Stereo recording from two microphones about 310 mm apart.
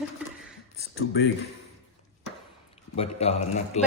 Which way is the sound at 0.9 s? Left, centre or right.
Left.